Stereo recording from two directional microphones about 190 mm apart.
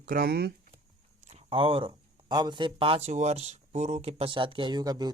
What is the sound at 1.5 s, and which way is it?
Speech, 30° right (ahead or behind).